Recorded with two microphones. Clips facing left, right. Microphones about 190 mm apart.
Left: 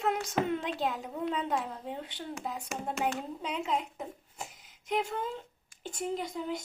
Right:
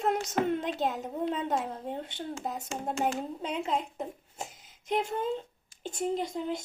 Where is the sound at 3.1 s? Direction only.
30° right (ahead or behind).